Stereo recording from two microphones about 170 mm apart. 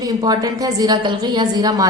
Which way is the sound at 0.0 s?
25° right (ahead or behind).